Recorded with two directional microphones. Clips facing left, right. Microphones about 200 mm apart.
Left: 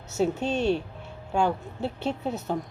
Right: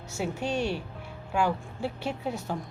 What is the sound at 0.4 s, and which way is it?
A woman's voice, 25° left (ahead or behind).